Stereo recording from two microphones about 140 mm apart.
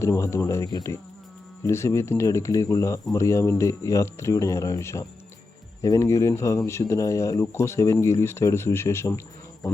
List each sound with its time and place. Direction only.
0.0 s speech: 20° left (ahead or behind)